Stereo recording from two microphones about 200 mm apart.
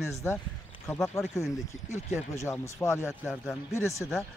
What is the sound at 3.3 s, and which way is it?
Speech, centre (ahead or behind).